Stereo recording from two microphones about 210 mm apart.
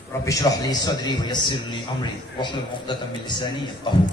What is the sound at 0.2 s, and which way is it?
A man's voice, 15° left (ahead or behind).